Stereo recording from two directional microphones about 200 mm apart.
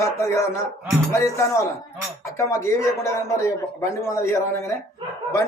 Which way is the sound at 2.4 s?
15° left (ahead or behind).